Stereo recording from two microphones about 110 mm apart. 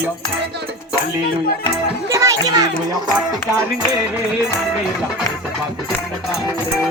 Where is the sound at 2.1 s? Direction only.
30° right (ahead or behind).